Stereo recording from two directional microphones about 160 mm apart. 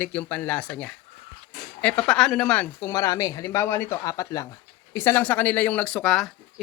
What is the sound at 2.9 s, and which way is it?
Speech, 20° left (ahead or behind).